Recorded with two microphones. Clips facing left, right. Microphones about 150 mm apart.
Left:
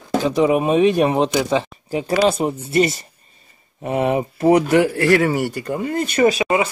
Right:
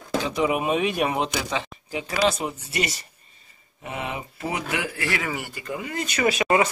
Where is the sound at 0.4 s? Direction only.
35° left (ahead or behind).